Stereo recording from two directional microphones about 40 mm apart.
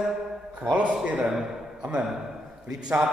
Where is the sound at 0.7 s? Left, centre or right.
Right.